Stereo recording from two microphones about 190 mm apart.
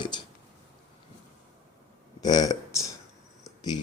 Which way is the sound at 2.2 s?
20° left (ahead or behind).